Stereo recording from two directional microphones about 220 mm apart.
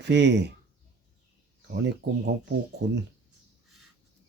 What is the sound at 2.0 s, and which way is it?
Speech, 50° right (ahead or behind).